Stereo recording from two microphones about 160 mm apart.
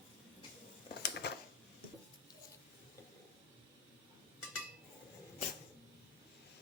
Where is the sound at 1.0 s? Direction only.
90° left.